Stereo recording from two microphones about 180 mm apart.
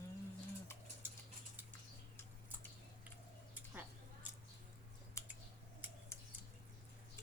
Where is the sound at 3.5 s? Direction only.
10° right (ahead or behind).